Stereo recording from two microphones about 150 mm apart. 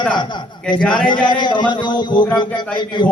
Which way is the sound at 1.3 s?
30° left (ahead or behind).